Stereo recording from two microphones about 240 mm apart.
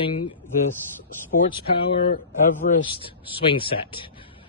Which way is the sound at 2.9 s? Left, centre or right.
Left.